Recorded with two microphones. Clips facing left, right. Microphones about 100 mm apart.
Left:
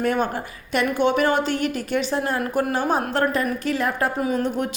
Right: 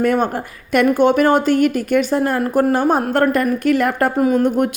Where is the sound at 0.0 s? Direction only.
50° right (ahead or behind).